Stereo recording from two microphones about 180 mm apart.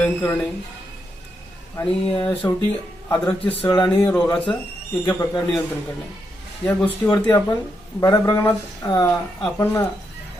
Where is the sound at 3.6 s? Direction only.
25° left (ahead or behind).